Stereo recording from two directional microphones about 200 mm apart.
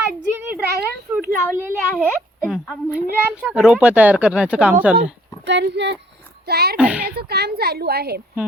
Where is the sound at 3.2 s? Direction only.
5° right (ahead or behind).